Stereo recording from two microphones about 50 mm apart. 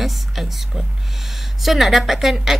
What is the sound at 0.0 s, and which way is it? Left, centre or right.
Speech, centre.